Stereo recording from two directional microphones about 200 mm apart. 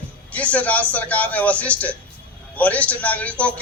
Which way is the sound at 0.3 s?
5° left (ahead or behind).